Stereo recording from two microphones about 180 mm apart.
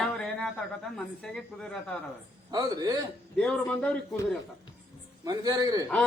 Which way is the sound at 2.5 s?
20° right (ahead or behind).